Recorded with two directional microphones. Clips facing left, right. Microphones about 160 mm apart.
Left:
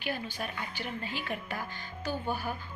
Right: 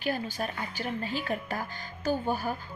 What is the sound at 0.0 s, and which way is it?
Speech, 40° right (ahead or behind).